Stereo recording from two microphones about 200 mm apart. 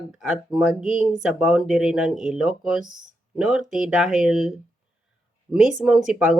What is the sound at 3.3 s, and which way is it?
Speech, 5° right (ahead or behind).